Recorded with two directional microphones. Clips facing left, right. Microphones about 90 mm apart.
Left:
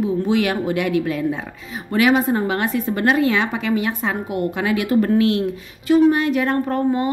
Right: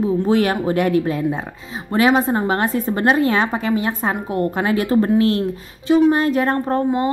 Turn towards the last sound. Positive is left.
turn(degrees=-30)  # may be behind; listen again after turning